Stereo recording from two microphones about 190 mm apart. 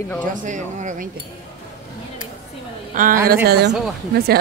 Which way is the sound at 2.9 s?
45° right (ahead or behind).